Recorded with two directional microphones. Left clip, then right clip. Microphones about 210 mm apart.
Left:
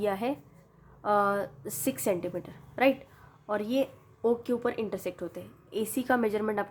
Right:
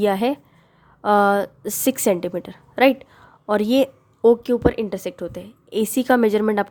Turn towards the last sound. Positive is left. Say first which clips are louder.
# right 10 dB
turn(degrees=-45)  # may be behind; listen again after turning